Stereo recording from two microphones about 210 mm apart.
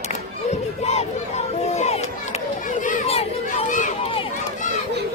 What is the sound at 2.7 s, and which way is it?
Children playing, 35° left (ahead or behind).